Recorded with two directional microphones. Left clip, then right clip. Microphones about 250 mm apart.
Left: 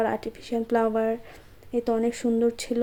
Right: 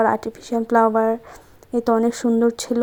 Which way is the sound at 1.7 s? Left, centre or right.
Centre.